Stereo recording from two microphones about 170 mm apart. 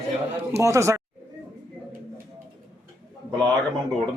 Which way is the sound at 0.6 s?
20° right (ahead or behind).